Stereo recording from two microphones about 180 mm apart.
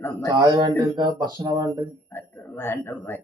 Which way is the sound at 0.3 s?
25° right (ahead or behind).